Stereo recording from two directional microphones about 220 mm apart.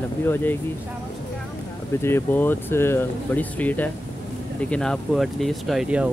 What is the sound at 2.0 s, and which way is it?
Speech, 10° left (ahead or behind).